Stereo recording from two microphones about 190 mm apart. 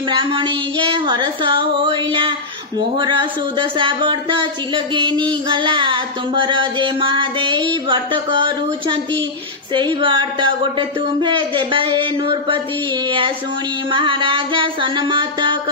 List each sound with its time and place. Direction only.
0.1 s speech: 25° right (ahead or behind)
13.8 s speech: 25° right (ahead or behind)